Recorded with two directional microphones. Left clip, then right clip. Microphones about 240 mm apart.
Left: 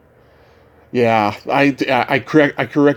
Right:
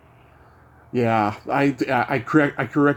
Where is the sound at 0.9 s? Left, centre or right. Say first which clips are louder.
Left 6 dB; centre.